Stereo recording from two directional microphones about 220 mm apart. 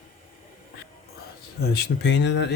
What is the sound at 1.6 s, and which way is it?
Speech, 50° left (ahead or behind).